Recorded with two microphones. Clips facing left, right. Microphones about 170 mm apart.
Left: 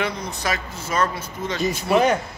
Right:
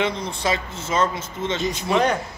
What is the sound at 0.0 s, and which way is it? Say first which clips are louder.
A man's voice: right 2 dB; 25° right (ahead or behind).